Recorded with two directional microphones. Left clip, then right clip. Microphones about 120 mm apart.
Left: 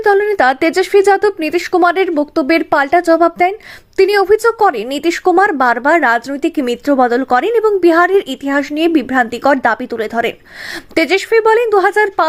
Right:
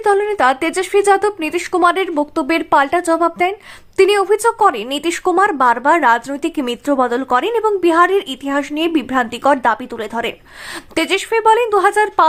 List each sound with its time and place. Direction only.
0.0 s a woman's voice: 30° left (ahead or behind)